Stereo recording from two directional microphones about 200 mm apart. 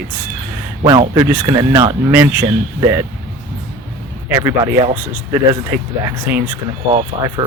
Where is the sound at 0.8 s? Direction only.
25° right (ahead or behind).